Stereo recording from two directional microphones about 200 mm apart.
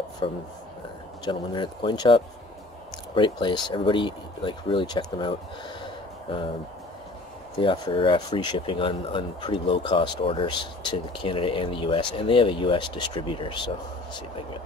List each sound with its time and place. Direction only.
0.2 s speech: 25° left (ahead or behind)
7.5 s speech: 25° left (ahead or behind)